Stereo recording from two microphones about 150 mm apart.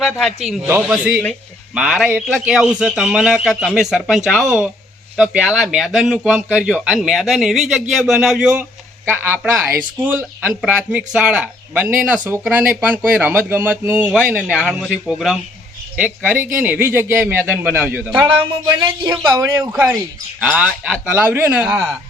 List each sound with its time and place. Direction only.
0.0 s speech: 5° left (ahead or behind)
0.6 s speech: 10° right (ahead or behind)
14.3 s speech: 10° left (ahead or behind); by 18.2 s 10° right (ahead or behind)
18.8 s a man's voice: 25° right (ahead or behind)
20.4 s speech: 5° right (ahead or behind)